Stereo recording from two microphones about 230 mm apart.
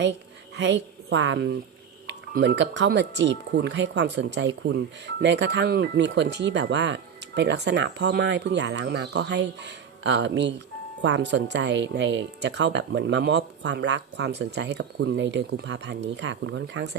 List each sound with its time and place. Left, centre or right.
0.0 s a woman's voice: right